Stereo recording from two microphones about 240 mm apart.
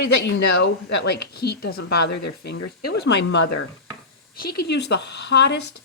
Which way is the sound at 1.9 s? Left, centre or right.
Left.